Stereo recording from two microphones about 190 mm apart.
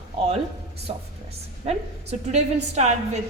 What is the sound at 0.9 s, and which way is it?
A woman's voice, 30° right (ahead or behind).